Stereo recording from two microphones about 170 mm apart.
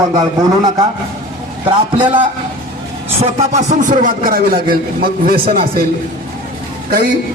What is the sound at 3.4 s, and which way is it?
A man's voice, 45° right (ahead or behind).